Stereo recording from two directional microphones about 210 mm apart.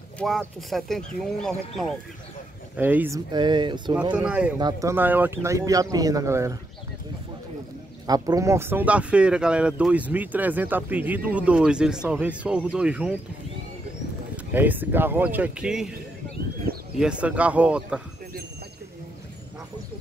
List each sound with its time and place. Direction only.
0.2 s speech: centre (ahead or behind)
2.7 s speech: 10° right (ahead or behind)
3.3 s speech: 20° right (ahead or behind)
4.1 s speech: 5° right (ahead or behind)
4.6 s speech: 15° right (ahead or behind)
8.1 s speech: 15° right (ahead or behind)
14.3 s speech: 10° right (ahead or behind)
17.0 s speech: 5° right (ahead or behind)